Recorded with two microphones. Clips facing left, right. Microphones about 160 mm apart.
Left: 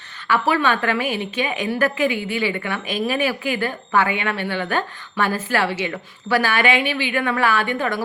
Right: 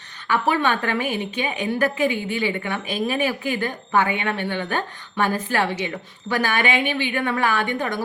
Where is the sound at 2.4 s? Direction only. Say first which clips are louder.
Left 1 dB; 20° right (ahead or behind).